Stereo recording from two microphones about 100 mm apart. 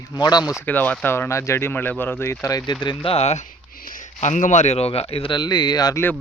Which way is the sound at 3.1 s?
90° left.